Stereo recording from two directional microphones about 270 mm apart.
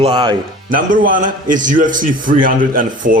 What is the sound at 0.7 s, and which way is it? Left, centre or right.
A man's voice, right.